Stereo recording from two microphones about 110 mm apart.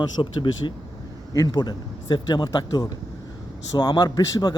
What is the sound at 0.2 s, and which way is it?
A man's voice, 45° left (ahead or behind).